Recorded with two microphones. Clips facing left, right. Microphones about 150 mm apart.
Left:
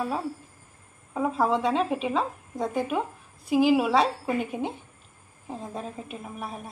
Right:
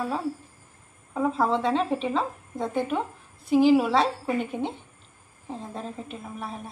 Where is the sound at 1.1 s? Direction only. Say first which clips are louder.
Even; 5° left (ahead or behind).